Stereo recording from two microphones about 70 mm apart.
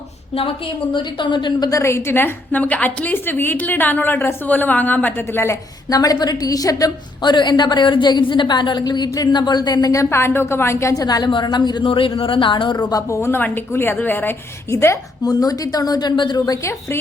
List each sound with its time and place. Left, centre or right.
1.3 s a woman's voice: left
1.7 s a woman's voice: left
5.9 s a woman's voice: left
7.2 s a woman's voice: left
9.9 s a woman's voice: left
11.0 s a woman's voice: left
12.7 s a woman's voice: left
13.1 s a woman's voice: left
15.2 s a woman's voice: left